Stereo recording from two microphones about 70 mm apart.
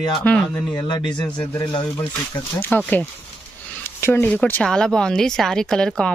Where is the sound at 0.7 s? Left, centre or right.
Left.